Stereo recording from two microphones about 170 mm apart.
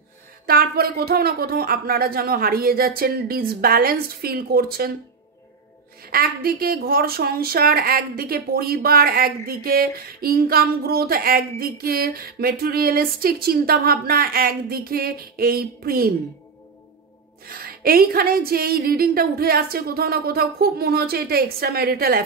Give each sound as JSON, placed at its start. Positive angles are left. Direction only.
{"t": 0.5, "sound": "a woman's voice", "side_deg": -65}
{"t": 6.0, "sound": "a woman's voice", "side_deg": -60}
{"t": 17.5, "sound": "a woman's voice", "side_deg": -60}